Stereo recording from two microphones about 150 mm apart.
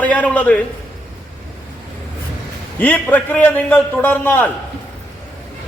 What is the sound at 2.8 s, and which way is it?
A man's voice, 10° left (ahead or behind).